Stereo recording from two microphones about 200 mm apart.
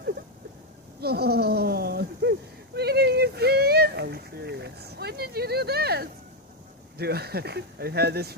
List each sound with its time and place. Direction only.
1.0 s speech: 50° right (ahead or behind)
2.7 s a sound: 55° right (ahead or behind)
7.0 s speech: 50° right (ahead or behind)